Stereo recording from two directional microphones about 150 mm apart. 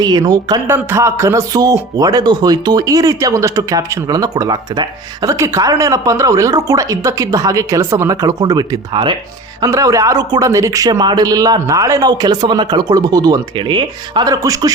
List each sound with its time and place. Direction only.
0.0 s speech: 25° right (ahead or behind)